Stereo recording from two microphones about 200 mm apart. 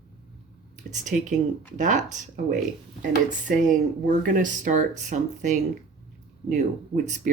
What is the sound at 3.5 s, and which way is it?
Speech, 50° right (ahead or behind).